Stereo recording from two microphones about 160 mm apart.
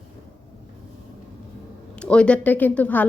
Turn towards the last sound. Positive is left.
turn(degrees=10)  # may be behind; listen again after turning